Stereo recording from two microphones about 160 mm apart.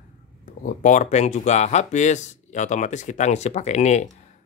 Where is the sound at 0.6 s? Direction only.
50° left (ahead or behind).